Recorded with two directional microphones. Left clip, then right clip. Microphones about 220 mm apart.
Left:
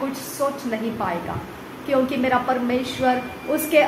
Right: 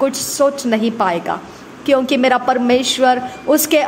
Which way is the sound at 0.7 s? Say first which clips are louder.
Right 9 dB; 50° right (ahead or behind).